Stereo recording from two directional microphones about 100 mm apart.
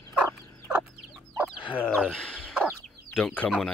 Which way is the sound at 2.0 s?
10° left (ahead or behind).